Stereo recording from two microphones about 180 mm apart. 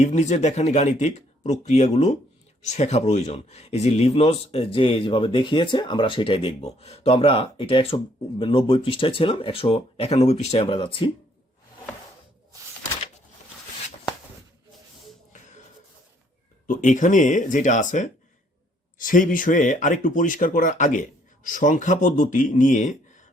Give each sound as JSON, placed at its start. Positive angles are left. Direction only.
{"t": 0.0, "sound": "speech", "side_deg": 40}
{"t": 16.6, "sound": "speech", "side_deg": 45}